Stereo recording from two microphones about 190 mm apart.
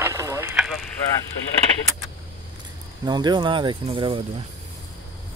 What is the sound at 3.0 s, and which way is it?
Speech, 20° right (ahead or behind).